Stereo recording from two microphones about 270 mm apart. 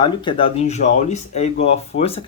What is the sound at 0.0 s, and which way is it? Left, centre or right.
Speech, centre.